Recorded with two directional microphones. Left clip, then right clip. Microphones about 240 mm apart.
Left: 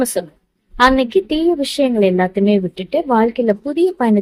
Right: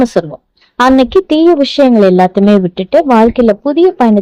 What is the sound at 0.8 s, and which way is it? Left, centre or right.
Speech, right.